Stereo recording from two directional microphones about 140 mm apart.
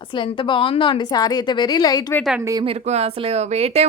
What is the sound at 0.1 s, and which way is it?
A woman's voice, 35° left (ahead or behind).